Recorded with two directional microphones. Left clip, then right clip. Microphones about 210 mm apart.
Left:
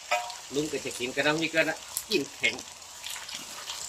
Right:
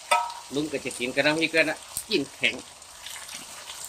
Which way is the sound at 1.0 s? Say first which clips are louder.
Right 4 dB; 55° right (ahead or behind).